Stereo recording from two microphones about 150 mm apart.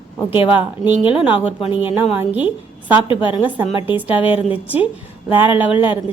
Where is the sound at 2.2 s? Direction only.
10° right (ahead or behind).